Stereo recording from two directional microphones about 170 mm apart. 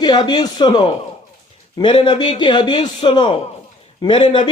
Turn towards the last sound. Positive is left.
turn(degrees=35)  # may be behind; listen again after turning